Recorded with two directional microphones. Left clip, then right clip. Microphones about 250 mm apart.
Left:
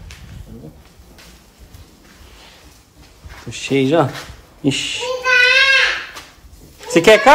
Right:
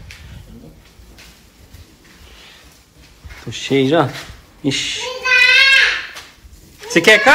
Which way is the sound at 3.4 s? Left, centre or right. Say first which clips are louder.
Right 1 dB; left.